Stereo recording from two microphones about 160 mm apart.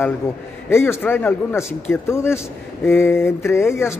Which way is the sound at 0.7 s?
15° left (ahead or behind).